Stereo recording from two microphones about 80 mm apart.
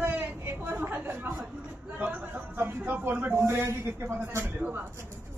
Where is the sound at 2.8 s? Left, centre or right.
Right.